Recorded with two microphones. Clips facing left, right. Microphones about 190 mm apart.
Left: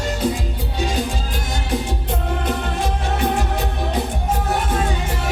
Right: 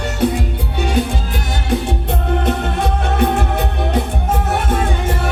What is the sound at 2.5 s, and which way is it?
Music, 60° right (ahead or behind).